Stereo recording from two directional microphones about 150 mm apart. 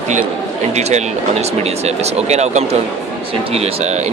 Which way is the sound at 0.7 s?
50° right (ahead or behind).